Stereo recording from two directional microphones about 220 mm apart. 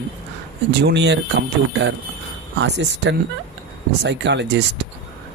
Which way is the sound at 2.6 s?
55° right (ahead or behind).